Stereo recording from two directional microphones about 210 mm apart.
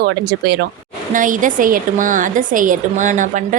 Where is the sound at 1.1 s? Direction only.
40° right (ahead or behind).